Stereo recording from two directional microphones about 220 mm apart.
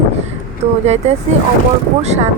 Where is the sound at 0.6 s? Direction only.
30° right (ahead or behind).